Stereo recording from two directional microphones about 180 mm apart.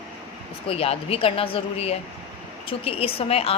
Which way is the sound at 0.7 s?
35° left (ahead or behind).